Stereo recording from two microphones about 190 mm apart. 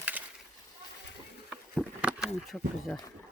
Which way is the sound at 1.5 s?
5° right (ahead or behind).